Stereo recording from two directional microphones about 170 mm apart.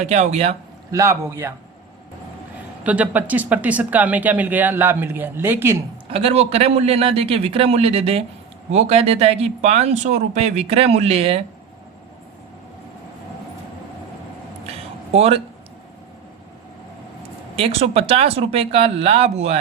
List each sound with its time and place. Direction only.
0.0 s speech: 40° right (ahead or behind)
0.9 s speech: 15° right (ahead or behind)
2.8 s speech: 10° right (ahead or behind)
6.1 s speech: 35° right (ahead or behind)
14.7 s a sound: 35° right (ahead or behind)
17.6 s speech: 35° right (ahead or behind)